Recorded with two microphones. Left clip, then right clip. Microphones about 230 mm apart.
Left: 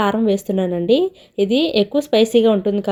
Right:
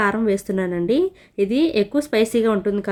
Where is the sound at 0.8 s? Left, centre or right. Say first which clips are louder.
Left 5 dB; right.